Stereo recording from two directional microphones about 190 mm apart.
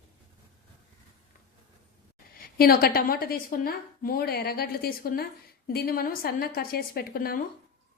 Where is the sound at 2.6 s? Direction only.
50° left (ahead or behind).